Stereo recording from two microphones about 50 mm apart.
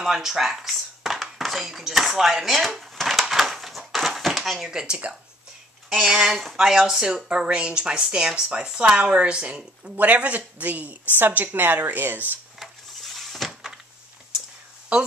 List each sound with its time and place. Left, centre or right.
0.0 s speech: centre
2.7 s a sound: centre
5.9 s speech: centre
7.2 s speech: right
9.9 s speech: right
12.5 s a sound: centre